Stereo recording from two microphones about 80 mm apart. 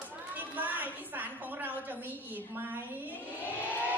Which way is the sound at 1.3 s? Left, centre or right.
Right.